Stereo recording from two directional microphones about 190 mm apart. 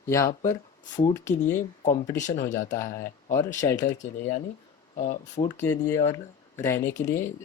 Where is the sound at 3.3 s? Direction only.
15° left (ahead or behind).